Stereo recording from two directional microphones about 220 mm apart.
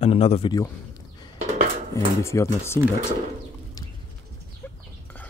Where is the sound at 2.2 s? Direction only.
10° left (ahead or behind).